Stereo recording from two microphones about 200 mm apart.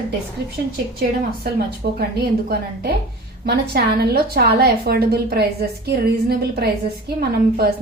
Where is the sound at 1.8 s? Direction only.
50° right (ahead or behind).